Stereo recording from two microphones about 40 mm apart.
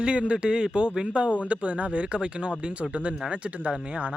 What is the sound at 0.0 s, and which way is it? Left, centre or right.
Speech, right.